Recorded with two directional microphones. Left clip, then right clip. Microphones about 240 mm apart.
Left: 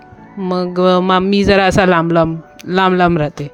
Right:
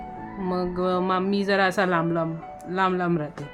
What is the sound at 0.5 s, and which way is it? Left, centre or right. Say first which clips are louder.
Speech: left 12 dB; left.